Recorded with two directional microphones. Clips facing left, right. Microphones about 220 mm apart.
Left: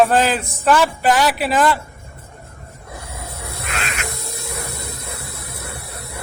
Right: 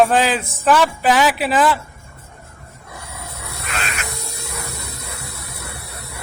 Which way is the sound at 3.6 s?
50° left (ahead or behind).